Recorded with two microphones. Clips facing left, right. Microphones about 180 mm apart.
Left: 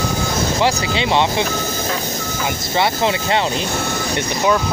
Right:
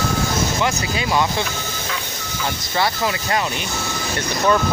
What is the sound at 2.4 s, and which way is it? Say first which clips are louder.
Speech: left 2 dB; 25° left (ahead or behind).